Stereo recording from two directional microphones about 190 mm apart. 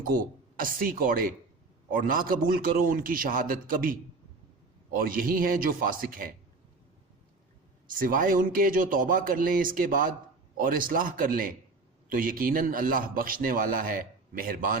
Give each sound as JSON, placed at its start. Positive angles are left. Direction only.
{"t": 0.0, "sound": "a man's voice", "side_deg": -50}
{"t": 4.9, "sound": "a man's voice", "side_deg": -50}
{"t": 7.9, "sound": "a man's voice", "side_deg": -45}